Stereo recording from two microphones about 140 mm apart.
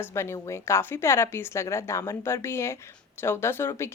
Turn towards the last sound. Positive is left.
turn(degrees=20)  # may be behind; listen again after turning